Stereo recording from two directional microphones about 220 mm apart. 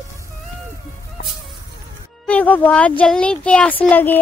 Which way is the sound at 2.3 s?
5° left (ahead or behind).